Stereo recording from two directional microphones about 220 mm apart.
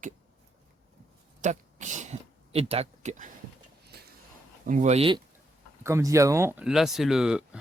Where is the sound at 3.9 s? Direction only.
45° right (ahead or behind).